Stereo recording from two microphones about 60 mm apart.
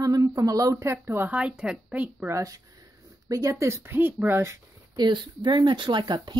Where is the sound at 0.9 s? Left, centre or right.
Right.